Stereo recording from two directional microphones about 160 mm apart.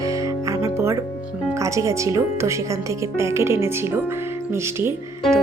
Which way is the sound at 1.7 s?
20° right (ahead or behind).